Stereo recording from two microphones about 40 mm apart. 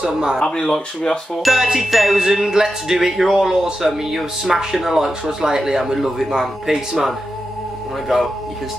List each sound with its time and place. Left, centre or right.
0.0 s speech: right
0.5 s speech: centre
1.4 s music: centre
2.1 s speech: centre
4.1 s music: centre
4.7 s speech: centre